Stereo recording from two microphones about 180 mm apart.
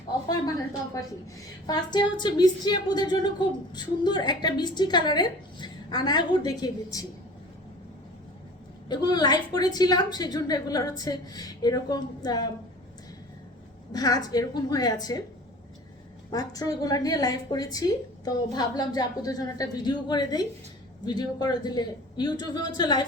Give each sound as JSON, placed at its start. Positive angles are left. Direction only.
{"t": 0.3, "sound": "a woman's voice", "side_deg": 20}
{"t": 8.9, "sound": "a woman's voice", "side_deg": 25}
{"t": 13.9, "sound": "a woman's voice", "side_deg": 20}
{"t": 16.3, "sound": "a woman's voice", "side_deg": 20}